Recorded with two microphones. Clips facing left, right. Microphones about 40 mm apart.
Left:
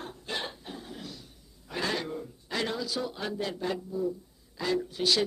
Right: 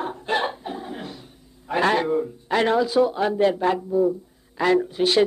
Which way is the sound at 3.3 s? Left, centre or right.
Right.